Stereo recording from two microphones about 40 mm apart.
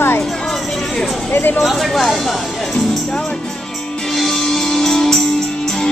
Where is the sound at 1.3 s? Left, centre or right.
Left.